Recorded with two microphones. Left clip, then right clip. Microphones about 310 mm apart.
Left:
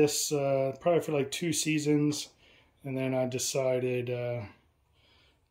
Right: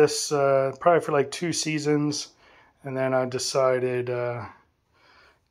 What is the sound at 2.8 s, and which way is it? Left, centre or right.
Speech, right.